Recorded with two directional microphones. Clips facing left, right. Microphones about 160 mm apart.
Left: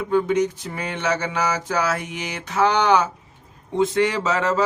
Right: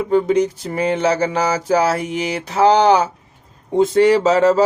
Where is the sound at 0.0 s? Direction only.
35° right (ahead or behind).